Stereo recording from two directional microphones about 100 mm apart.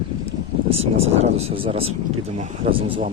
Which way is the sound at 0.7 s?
85° right.